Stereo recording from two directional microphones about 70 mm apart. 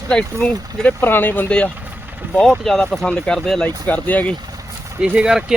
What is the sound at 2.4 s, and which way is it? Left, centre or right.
Speech, centre.